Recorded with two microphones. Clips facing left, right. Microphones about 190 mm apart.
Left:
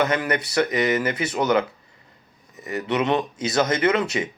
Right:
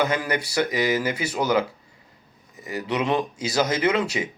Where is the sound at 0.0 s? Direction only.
10° right (ahead or behind).